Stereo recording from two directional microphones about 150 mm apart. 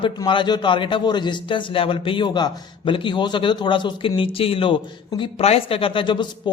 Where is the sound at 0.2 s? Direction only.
30° left (ahead or behind).